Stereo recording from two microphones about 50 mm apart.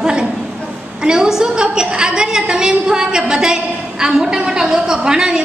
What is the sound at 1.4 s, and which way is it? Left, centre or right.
A woman's voice, centre.